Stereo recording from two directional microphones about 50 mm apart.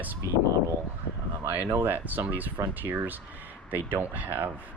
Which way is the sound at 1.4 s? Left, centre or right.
Right.